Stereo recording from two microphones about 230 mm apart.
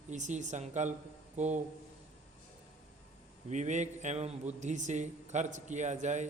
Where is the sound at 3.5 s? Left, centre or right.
Right.